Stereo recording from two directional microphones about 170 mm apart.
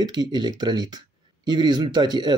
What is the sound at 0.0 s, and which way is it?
Speech, 25° right (ahead or behind).